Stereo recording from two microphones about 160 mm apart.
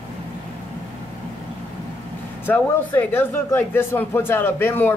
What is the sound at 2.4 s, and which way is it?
Speech, 10° left (ahead or behind).